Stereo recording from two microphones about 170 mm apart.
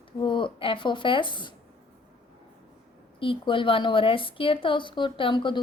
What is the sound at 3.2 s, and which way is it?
A woman's voice, 30° left (ahead or behind).